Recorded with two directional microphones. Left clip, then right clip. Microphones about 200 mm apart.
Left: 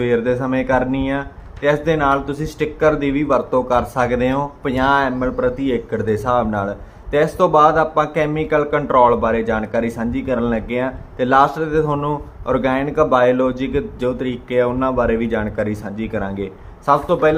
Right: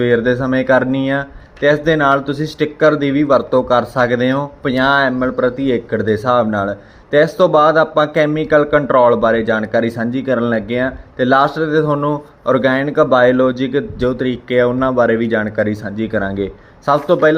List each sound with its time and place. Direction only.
0.0 s speech: 15° right (ahead or behind)